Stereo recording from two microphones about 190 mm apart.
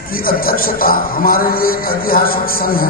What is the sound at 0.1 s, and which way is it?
A man's voice, 50° left (ahead or behind).